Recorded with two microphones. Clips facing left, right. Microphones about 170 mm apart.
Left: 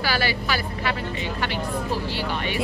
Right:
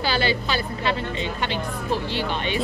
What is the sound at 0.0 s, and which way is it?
Speech, 25° right (ahead or behind).